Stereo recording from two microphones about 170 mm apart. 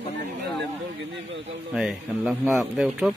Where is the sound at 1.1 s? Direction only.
90° right.